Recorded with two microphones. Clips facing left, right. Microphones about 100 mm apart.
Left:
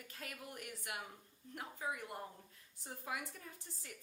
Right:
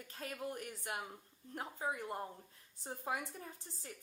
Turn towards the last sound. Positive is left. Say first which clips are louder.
# right 3 dB
turn(degrees=-30)  # may be behind; listen again after turning